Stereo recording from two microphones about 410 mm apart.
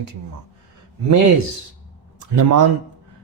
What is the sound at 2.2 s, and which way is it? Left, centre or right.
Speech, right.